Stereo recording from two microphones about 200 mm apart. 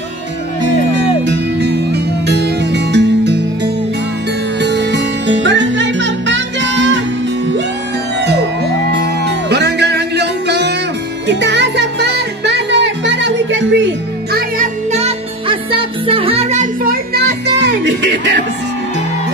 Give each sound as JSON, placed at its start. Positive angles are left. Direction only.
{"t": 0.7, "sound": "music", "side_deg": -60}
{"t": 8.9, "sound": "music", "side_deg": -60}
{"t": 14.3, "sound": "music", "side_deg": -40}